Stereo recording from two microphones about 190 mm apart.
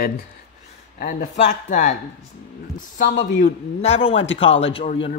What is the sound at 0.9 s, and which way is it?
Speech, 45° left (ahead or behind).